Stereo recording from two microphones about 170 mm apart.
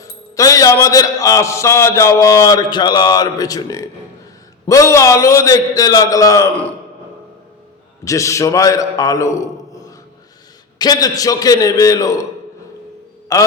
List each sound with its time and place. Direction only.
0.0 s a man's voice: 20° left (ahead or behind)
8.0 s a man's voice: 20° left (ahead or behind)